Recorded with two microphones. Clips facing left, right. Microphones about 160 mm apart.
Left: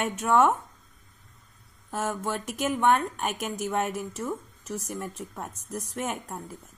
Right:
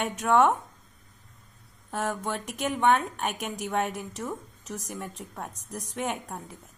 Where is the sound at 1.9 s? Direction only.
Centre (ahead or behind).